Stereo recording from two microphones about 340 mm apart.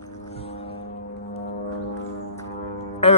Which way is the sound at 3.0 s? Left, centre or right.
Centre.